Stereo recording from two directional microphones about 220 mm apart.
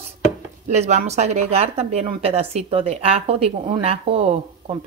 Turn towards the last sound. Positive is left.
turn(degrees=-25)  # may be behind; listen again after turning